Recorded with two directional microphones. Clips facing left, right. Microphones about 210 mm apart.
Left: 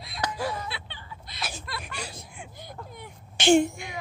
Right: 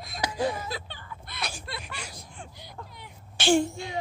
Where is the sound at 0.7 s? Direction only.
40° right (ahead or behind).